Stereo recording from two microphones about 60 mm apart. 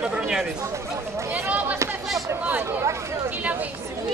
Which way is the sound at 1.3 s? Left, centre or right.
Right.